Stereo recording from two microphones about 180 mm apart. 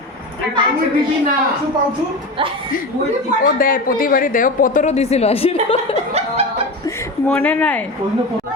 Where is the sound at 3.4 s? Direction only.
50° left (ahead or behind); by 5.8 s 35° left (ahead or behind).